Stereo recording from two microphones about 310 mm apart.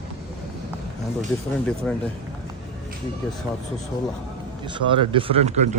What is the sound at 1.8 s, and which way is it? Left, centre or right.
Speech, centre.